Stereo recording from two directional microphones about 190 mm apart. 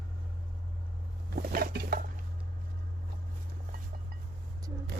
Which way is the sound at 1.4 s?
55° right (ahead or behind).